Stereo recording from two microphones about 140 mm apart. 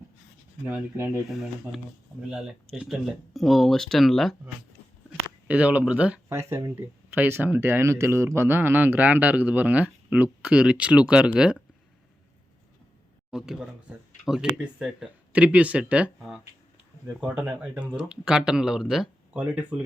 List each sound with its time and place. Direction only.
0.6 s speech: 15° right (ahead or behind)
1.3 s speech: centre (ahead or behind)
5.5 s speech: 10° right (ahead or behind)
13.3 s speech: 5° right (ahead or behind)